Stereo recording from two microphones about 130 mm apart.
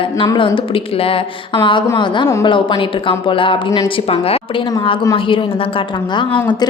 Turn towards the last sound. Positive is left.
turn(degrees=35)  # may be behind; listen again after turning